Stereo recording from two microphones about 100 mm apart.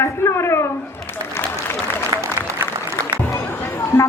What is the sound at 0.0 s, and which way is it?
Speech, 25° left (ahead or behind).